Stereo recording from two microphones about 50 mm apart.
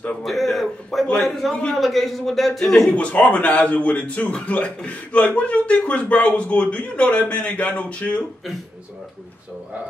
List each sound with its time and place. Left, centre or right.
0.2 s a sound: centre
1.5 s a man's voice: centre
1.8 s a man's voice: centre
2.9 s speech: left